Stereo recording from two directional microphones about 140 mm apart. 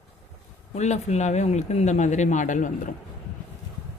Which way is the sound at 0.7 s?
55° left (ahead or behind).